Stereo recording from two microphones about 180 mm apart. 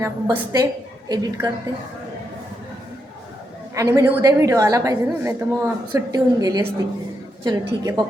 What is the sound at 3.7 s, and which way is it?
A woman's voice, 15° right (ahead or behind).